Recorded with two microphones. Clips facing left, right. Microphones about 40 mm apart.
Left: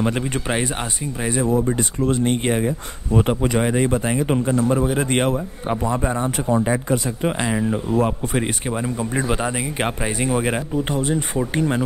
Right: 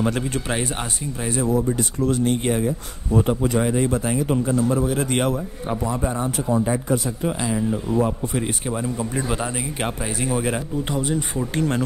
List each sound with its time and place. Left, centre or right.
0.0 s speech: left
3.6 s speech: left
8.6 s speech: left